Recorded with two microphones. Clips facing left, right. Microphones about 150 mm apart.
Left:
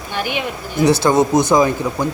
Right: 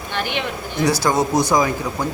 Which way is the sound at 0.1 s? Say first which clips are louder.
Left 2 dB; 10° left (ahead or behind).